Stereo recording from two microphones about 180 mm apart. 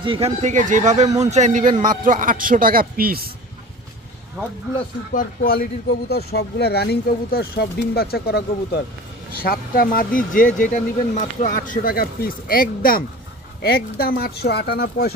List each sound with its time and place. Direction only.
0.0 s a man's voice: 30° right (ahead or behind); by 3.3 s 55° right (ahead or behind)
5.1 s a man's voice: 50° left (ahead or behind)